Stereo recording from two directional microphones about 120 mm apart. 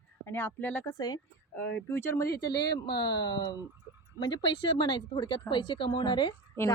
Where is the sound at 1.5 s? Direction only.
15° left (ahead or behind).